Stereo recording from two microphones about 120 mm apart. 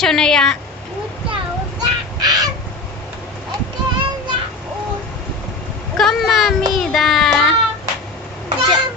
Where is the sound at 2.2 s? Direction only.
35° right (ahead or behind).